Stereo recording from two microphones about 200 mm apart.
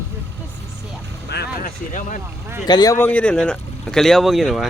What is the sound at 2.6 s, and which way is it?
Speech, 20° left (ahead or behind).